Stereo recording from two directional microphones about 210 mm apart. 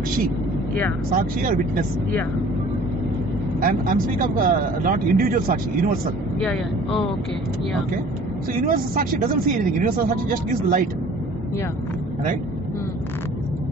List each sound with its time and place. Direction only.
1.1 s speech: 40° right (ahead or behind)
3.6 s speech: 45° right (ahead or behind)
8.6 s speech: 40° right (ahead or behind)